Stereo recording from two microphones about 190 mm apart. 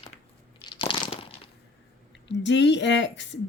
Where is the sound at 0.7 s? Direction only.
25° left (ahead or behind).